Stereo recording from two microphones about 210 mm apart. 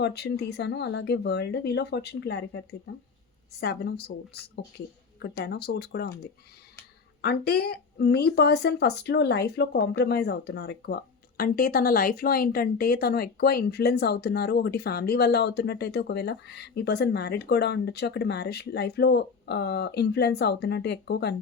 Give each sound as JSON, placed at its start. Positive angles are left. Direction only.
{"t": 0.0, "sound": "speech", "side_deg": 50}
{"t": 7.2, "sound": "speech", "side_deg": 50}